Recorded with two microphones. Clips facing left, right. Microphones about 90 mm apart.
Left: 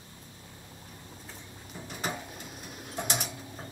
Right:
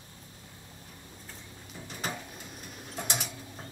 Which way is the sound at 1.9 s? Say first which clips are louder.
Left 2 dB; 10° left (ahead or behind).